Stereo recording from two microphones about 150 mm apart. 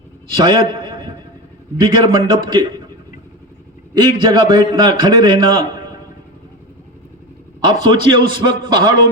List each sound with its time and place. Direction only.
0.3 s a man's voice: 30° right (ahead or behind)
3.9 s a man's voice: 30° right (ahead or behind)
7.6 s a man's voice: 30° right (ahead or behind)